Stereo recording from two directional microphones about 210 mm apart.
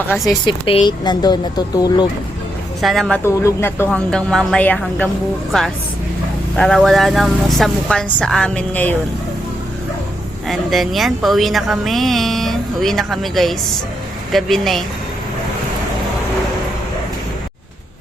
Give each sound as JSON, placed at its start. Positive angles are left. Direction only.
{"t": 0.1, "sound": "a woman's voice", "side_deg": 20}
{"t": 2.8, "sound": "speech", "side_deg": 0}
{"t": 3.2, "sound": "a woman's voice", "side_deg": 15}
{"t": 10.5, "sound": "speech", "side_deg": 0}